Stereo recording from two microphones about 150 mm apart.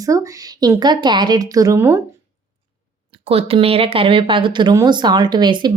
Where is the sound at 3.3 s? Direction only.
40° right (ahead or behind).